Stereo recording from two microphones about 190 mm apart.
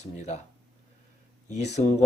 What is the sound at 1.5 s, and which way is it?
Speech, 35° left (ahead or behind).